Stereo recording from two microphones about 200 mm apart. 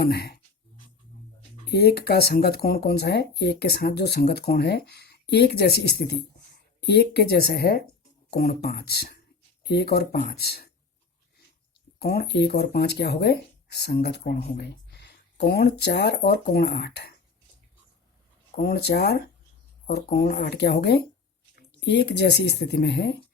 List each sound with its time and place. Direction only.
0.0 s speech: 50° left (ahead or behind)
1.6 s speech: 50° left (ahead or behind)
11.9 s speech: 50° left (ahead or behind)
18.5 s speech: 55° left (ahead or behind)